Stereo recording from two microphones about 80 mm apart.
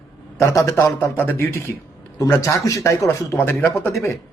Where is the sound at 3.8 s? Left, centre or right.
Left.